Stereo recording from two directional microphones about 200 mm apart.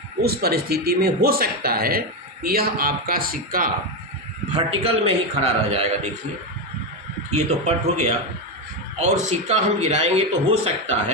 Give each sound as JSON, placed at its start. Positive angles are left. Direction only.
{"t": 0.2, "sound": "a man's voice", "side_deg": -50}
{"t": 4.5, "sound": "a man's voice", "side_deg": -30}
{"t": 7.3, "sound": "a man's voice", "side_deg": -35}